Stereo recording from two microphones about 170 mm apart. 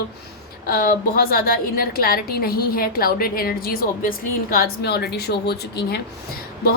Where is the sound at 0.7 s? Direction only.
60° left (ahead or behind).